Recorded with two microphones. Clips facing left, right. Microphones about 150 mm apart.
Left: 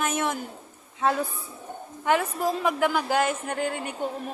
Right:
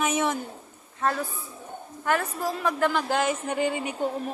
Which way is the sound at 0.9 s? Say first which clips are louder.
Left 2 dB; 15° left (ahead or behind).